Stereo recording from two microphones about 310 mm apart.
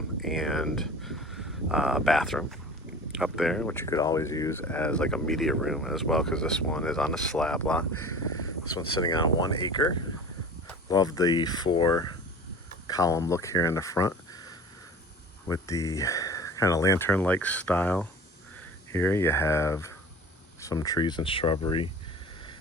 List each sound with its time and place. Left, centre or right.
0.2 s speech: centre
8.2 s crow: left
9.0 s speech: centre